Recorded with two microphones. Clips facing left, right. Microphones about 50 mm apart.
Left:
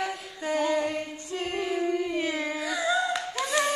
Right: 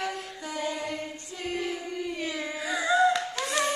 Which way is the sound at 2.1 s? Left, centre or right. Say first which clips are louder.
Left 4 dB; left.